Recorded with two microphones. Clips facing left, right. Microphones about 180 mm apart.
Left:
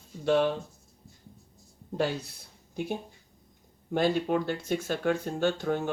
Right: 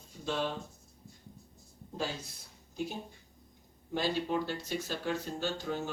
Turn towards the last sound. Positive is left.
turn(degrees=55)  # may be behind; listen again after turning